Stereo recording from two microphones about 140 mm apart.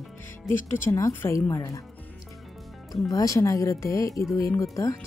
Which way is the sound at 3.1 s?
25° left (ahead or behind).